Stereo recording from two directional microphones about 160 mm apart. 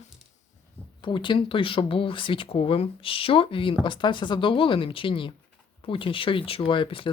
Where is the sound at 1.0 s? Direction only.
30° left (ahead or behind).